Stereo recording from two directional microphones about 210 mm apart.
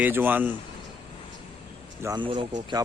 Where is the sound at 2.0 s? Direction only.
20° right (ahead or behind).